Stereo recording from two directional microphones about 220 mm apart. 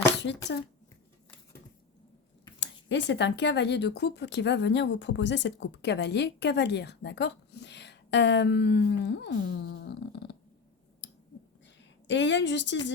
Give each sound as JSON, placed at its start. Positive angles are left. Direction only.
{"t": 2.9, "sound": "speech", "side_deg": 55}
{"t": 11.0, "sound": "clicking", "side_deg": 55}
{"t": 12.0, "sound": "speech", "side_deg": 55}